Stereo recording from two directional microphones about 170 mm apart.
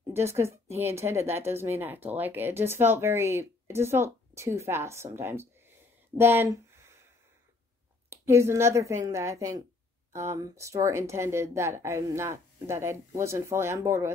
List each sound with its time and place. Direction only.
0.1 s speech: 15° right (ahead or behind)
6.1 s a sound: 15° right (ahead or behind)
8.1 s speech: 15° right (ahead or behind)